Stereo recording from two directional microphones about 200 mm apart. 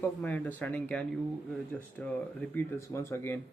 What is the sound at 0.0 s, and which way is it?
Speech, 5° left (ahead or behind).